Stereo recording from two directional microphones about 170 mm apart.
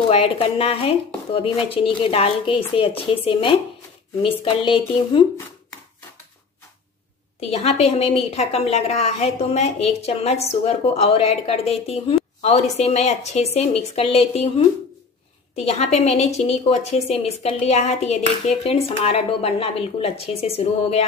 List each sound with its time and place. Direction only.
0.1 s a woman's voice: 35° left (ahead or behind)
7.3 s a woman's voice: 35° left (ahead or behind)
15.5 s a woman's voice: 40° left (ahead or behind)